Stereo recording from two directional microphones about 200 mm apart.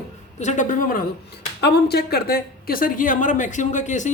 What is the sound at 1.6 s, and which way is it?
A woman's voice, 55° left (ahead or behind).